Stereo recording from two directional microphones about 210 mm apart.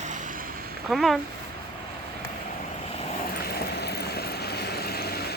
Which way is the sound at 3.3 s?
45° left (ahead or behind).